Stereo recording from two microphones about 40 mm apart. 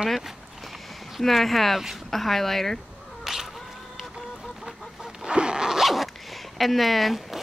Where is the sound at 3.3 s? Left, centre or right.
Centre.